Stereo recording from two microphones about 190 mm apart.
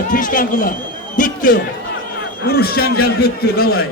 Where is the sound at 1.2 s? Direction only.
45° left (ahead or behind).